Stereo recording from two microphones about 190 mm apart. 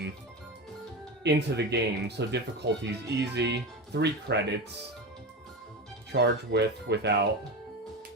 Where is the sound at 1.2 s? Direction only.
60° right (ahead or behind).